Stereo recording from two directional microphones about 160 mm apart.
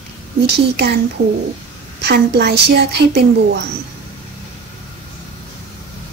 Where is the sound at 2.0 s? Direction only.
90° right.